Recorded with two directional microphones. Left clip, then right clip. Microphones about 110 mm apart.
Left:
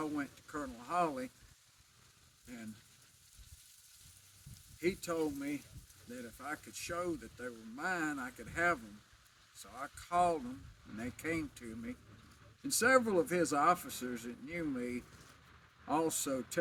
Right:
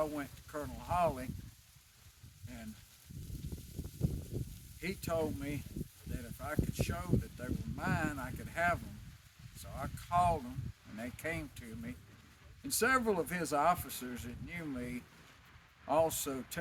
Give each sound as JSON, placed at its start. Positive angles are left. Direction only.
{"t": 0.0, "sound": "speech", "side_deg": -25}
{"t": 4.8, "sound": "speech", "side_deg": -25}